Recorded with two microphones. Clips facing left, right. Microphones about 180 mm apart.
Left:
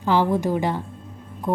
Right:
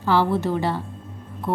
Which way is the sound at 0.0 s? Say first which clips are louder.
Even; 15° left (ahead or behind).